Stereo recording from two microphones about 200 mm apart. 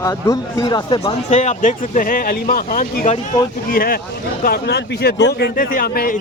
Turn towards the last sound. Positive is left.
turn(degrees=50)  # may be behind; listen again after turning